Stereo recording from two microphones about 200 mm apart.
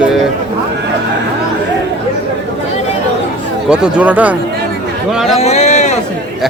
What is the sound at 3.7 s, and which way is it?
A man's voice, 5° right (ahead or behind).